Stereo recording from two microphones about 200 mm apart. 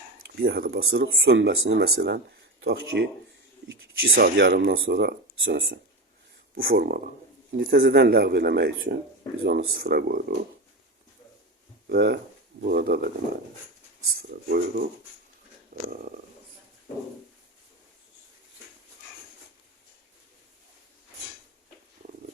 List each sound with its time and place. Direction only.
0.3 s speech: 50° right (ahead or behind)
1.0 s speech: 75° right (ahead or behind)
3.7 s speech: 50° right (ahead or behind)
6.7 s speech: 55° right (ahead or behind)
11.9 s speech: 55° right (ahead or behind)
15.7 s a sound: 45° right (ahead or behind)